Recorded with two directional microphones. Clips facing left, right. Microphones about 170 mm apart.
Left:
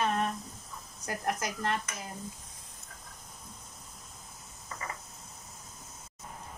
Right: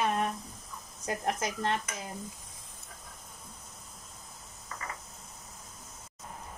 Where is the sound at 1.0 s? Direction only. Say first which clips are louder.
Right 1 dB; 25° right (ahead or behind).